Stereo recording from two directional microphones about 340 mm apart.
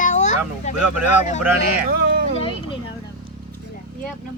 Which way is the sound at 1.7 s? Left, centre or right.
Right.